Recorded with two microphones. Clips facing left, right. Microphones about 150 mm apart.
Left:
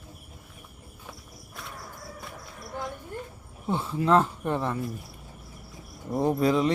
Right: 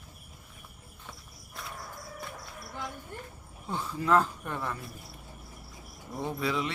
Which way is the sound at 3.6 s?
20° left (ahead or behind).